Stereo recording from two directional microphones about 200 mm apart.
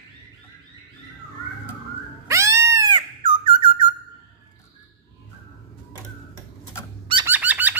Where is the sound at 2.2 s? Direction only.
15° right (ahead or behind).